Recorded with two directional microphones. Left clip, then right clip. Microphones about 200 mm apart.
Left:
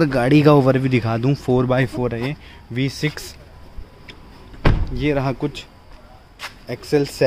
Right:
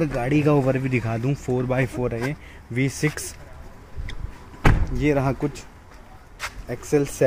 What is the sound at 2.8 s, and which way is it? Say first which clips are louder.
Speech: left 1 dB; 5° right (ahead or behind).